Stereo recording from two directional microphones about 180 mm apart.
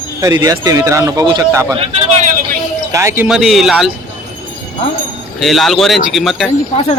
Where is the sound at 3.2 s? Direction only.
5° right (ahead or behind).